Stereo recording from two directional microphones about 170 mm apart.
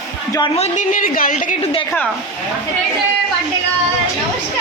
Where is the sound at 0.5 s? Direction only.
45° left (ahead or behind).